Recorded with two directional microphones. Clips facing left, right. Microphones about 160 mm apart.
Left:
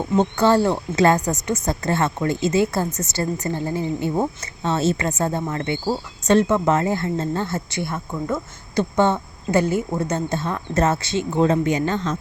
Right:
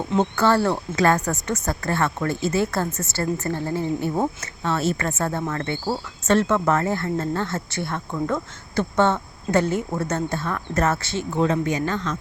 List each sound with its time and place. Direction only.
0.3 s speech: 15° left (ahead or behind)